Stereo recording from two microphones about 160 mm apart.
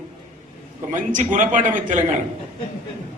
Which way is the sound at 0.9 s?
55° right (ahead or behind).